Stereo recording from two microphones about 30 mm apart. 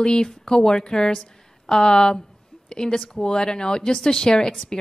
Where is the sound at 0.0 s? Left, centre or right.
Left.